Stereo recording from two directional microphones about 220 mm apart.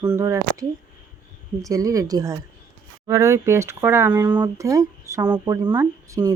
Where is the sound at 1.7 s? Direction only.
15° right (ahead or behind).